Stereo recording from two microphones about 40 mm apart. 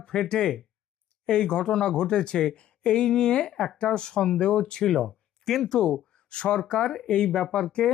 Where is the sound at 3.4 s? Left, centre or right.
Centre.